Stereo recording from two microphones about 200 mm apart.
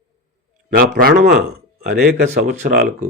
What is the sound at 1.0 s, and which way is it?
Speech, 50° right (ahead or behind).